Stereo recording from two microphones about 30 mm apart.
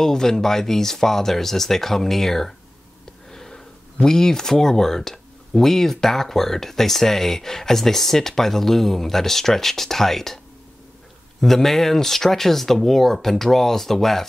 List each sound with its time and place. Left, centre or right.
0.0 s speech: centre
3.3 s a sound: centre
6.0 s speech: centre
11.4 s speech: centre